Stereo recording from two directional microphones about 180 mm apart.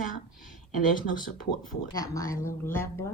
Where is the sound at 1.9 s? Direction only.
20° left (ahead or behind).